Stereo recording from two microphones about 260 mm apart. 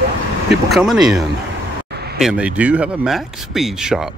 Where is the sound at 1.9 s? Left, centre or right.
Right.